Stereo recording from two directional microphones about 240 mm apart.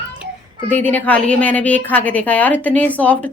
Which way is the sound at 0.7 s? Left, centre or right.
Centre.